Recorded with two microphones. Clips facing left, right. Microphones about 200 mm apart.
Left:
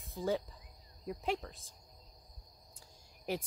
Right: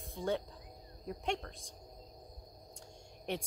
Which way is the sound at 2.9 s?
Centre (ahead or behind).